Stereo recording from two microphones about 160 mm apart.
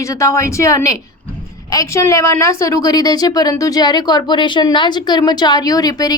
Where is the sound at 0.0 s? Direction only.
20° left (ahead or behind).